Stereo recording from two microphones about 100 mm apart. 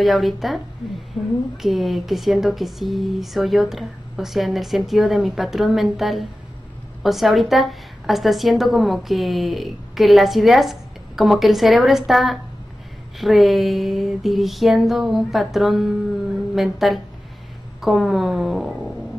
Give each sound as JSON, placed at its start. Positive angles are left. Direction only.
{"t": 0.0, "sound": "a woman's voice", "side_deg": 0}
{"t": 1.1, "sound": "a woman's voice", "side_deg": 15}
{"t": 1.6, "sound": "a woman's voice", "side_deg": 0}